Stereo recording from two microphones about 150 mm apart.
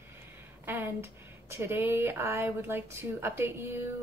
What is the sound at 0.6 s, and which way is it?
A woman's voice, 15° right (ahead or behind).